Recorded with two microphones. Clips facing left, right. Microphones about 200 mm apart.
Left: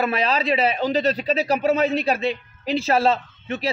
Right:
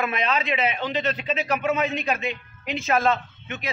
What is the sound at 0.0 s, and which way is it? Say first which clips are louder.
A man's voice: left 3 dB; 35° left (ahead or behind).